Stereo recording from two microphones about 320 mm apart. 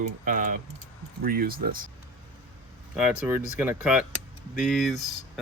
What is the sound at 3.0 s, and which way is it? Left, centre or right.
Speech, centre.